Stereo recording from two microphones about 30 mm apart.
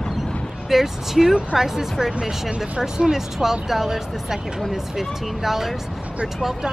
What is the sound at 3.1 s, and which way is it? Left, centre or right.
Speech, centre.